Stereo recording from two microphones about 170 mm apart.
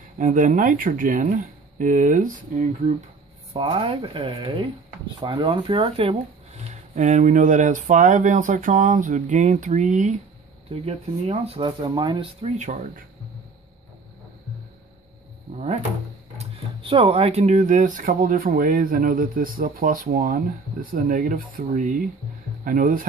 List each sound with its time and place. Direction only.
0.2 s speech: 50° right (ahead or behind)
3.5 s speech: 30° right (ahead or behind); by 13.0 s 50° right (ahead or behind)
15.5 s speech: 40° right (ahead or behind)